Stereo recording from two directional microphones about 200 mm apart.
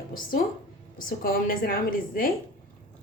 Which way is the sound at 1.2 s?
45° left (ahead or behind).